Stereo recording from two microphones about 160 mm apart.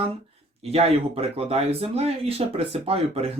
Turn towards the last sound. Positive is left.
turn(degrees=-40)  # may be behind; listen again after turning